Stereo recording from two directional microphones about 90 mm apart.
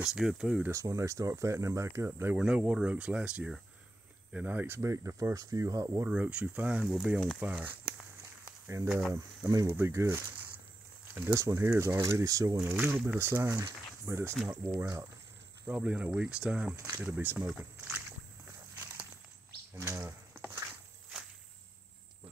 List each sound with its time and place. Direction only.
0.0 s speech: 5° right (ahead or behind)
0.7 s speech: 35° right (ahead or behind)
2.3 s speech: 10° right (ahead or behind); by 6.0 s 35° right (ahead or behind)
6.0 s speech: 15° right (ahead or behind)
9.1 s speech: 40° right (ahead or behind)
9.7 s speech: 30° right (ahead or behind)
11.3 s speech: 30° right (ahead or behind)
12.7 s speech: 20° right (ahead or behind)
15.6 s speech: 15° right (ahead or behind)
16.7 s speech: 30° right (ahead or behind)
17.0 s speech: 20° right (ahead or behind)
19.8 s a sound: 30° right (ahead or behind)